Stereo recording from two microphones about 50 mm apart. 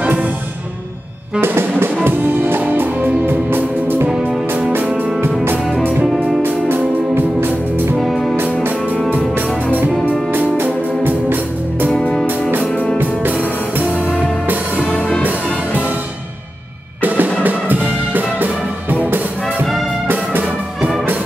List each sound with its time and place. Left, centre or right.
0.0 s music: right
1.4 s music: right
5.7 s music: centre
7.2 s music: right
8.0 s music: centre
10.6 s music: right
14.9 s music: left
15.2 s music: right
17.0 s music: right